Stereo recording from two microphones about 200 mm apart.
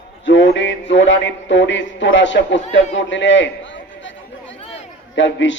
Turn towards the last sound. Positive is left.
turn(degrees=65)  # may be behind; listen again after turning